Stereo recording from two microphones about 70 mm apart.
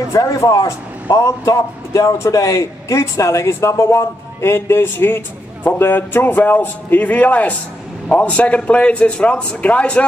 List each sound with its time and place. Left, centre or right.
0.1 s a man's voice: left; by 10.0 s centre